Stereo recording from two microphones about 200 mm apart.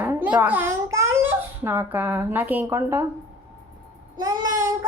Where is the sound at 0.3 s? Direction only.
10° right (ahead or behind).